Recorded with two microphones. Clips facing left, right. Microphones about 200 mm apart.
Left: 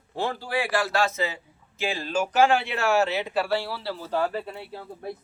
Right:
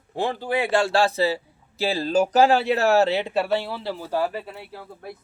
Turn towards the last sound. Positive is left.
turn(degrees=20)  # may be behind; listen again after turning